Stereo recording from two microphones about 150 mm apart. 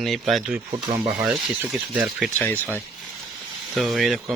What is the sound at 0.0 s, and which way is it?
Speech, centre (ahead or behind).